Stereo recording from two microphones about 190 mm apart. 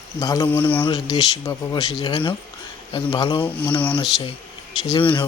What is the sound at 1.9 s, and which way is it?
Speech, 30° left (ahead or behind).